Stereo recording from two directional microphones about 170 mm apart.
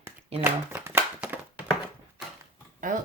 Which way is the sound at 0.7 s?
15° right (ahead or behind).